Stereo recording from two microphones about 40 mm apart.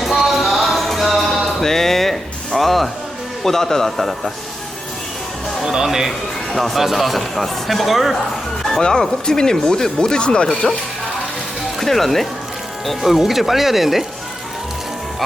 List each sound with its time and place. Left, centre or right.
0.1 s music: centre
3.4 s speech: centre
5.6 s speech: centre
6.5 s speech: centre
8.6 s speech: centre
11.8 s speech: centre
12.9 s speech: centre